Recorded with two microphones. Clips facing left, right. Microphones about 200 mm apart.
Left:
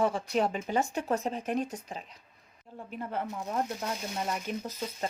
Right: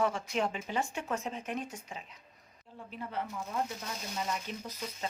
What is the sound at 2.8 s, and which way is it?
Speech, 50° left (ahead or behind).